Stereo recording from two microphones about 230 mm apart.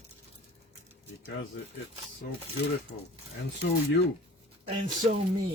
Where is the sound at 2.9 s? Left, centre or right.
Left.